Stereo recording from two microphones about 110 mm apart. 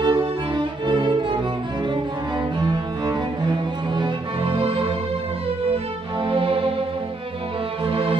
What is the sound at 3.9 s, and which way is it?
Music, 50° right (ahead or behind).